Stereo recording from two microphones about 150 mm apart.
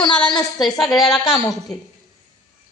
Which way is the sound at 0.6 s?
Centre (ahead or behind).